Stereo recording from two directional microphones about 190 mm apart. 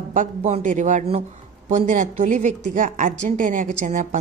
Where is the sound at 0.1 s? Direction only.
40° right (ahead or behind).